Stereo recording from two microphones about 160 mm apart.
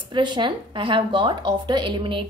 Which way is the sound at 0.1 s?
30° right (ahead or behind).